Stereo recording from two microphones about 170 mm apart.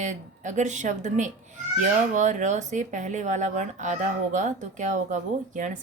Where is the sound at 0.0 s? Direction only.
45° right (ahead or behind).